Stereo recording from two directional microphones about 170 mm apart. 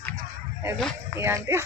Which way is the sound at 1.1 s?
15° right (ahead or behind).